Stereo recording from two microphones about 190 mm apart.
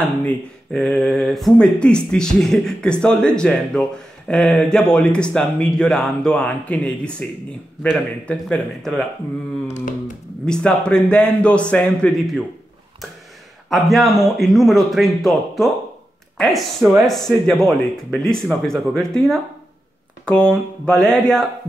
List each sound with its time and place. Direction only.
0.2 s speech: 5° left (ahead or behind)
9.7 s a sound: 40° left (ahead or behind)
10.4 s speech: 5° left (ahead or behind)
13.7 s speech: centre (ahead or behind)